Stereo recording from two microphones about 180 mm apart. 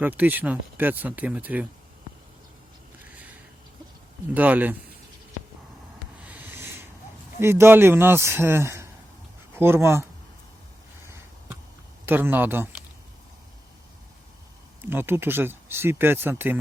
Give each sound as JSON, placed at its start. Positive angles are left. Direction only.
{"t": 0.0, "sound": "speech", "side_deg": -10}
{"t": 4.4, "sound": "speech", "side_deg": -10}
{"t": 6.2, "sound": "a sound", "side_deg": -10}
{"t": 7.3, "sound": "speech", "side_deg": -15}
{"t": 12.0, "sound": "speech", "side_deg": -10}
{"t": 14.8, "sound": "speech", "side_deg": -10}